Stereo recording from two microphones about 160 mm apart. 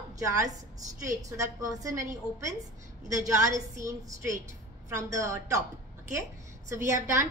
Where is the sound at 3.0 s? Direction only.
20° right (ahead or behind).